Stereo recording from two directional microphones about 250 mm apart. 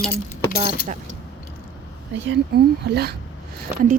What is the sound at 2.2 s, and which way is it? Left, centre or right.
Speech, right.